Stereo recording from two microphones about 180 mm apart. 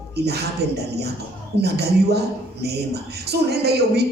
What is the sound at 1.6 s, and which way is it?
A woman's voice, 65° right (ahead or behind).